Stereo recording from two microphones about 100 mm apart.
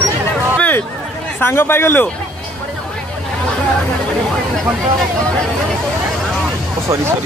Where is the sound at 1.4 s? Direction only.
25° left (ahead or behind).